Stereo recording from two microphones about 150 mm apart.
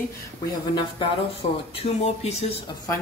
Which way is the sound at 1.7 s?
40° left (ahead or behind).